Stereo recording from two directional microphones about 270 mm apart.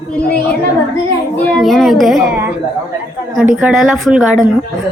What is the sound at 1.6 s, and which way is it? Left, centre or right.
A woman's voice, centre.